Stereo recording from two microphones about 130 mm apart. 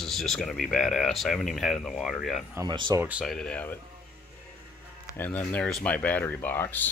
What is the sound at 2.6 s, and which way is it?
Speech, 35° right (ahead or behind).